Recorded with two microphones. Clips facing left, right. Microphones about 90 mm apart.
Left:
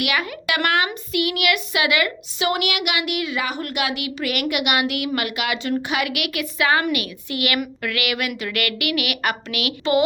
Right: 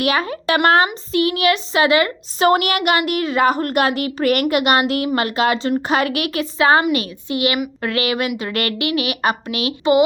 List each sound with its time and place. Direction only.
0.0 s a woman's voice: 35° right (ahead or behind)